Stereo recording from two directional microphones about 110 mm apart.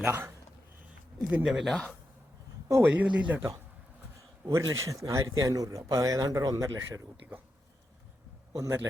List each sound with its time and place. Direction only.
0.0 s a man's voice: 20° right (ahead or behind)
1.7 s speech: 10° left (ahead or behind)
2.8 s speech: 15° right (ahead or behind)
4.4 s a man's voice: 25° right (ahead or behind)
8.5 s a man's voice: 25° right (ahead or behind)